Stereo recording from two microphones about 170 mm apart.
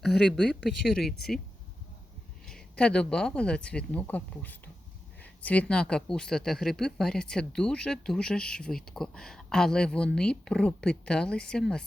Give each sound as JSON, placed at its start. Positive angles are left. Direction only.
{"t": 0.0, "sound": "speech", "side_deg": 5}
{"t": 2.5, "sound": "speech", "side_deg": 5}